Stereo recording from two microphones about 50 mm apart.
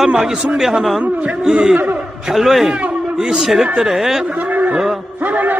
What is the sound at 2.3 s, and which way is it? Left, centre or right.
A man's voice, centre.